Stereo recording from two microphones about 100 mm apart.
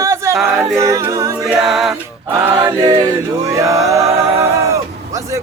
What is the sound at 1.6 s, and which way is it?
Music, 5° right (ahead or behind).